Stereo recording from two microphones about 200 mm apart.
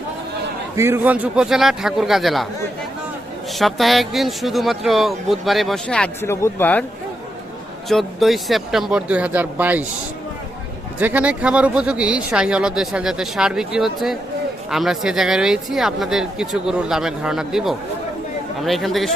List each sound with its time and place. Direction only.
0.8 s speech: 10° right (ahead or behind)
3.5 s speech: centre (ahead or behind)
7.9 s speech: centre (ahead or behind)
11.0 s speech: 5° right (ahead or behind)